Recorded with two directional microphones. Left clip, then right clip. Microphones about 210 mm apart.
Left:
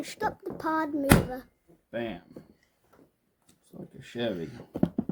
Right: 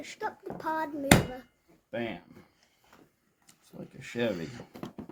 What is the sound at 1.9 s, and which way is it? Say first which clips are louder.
Speech: left 1 dB; 15° right (ahead or behind).